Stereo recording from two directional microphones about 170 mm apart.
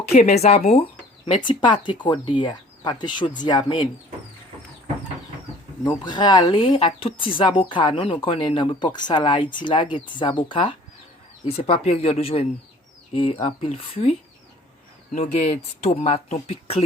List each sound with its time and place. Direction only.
0.1 s speech: 40° left (ahead or behind)
5.8 s speech: 25° left (ahead or behind)
15.1 s speech: 45° left (ahead or behind)